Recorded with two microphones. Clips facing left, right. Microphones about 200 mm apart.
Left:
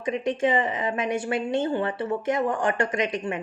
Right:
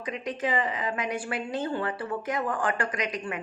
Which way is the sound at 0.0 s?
25° left (ahead or behind).